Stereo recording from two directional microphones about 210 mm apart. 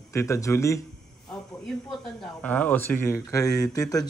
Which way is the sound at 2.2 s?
5° left (ahead or behind).